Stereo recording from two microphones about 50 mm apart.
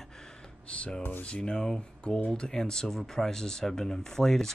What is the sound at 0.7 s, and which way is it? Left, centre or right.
Speech, left.